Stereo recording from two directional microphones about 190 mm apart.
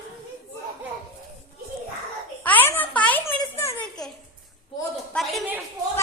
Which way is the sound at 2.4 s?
10° left (ahead or behind).